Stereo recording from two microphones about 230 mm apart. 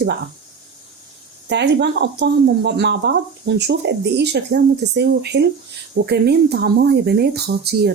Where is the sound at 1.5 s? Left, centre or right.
Right.